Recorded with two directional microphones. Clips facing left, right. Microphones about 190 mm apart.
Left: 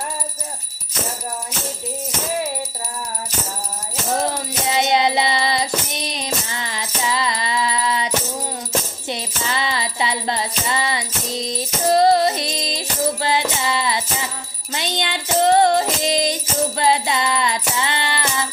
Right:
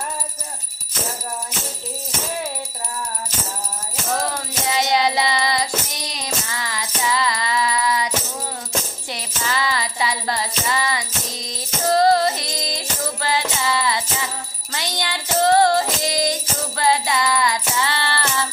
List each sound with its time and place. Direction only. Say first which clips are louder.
4.1 s music: left 2 dB; 20° left (ahead or behind)